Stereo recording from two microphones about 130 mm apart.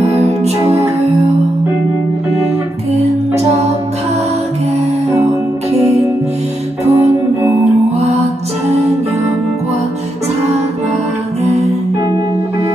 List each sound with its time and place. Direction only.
2.9 s music: 55° right (ahead or behind)
6.9 s music: 25° right (ahead or behind)
11.4 s music: 55° right (ahead or behind)